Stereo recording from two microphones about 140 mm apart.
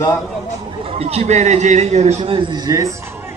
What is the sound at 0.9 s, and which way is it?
A man's voice, 45° right (ahead or behind).